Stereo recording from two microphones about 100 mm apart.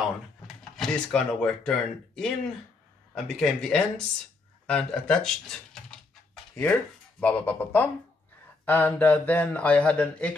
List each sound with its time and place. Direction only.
0.7 s speech: 5° left (ahead or behind)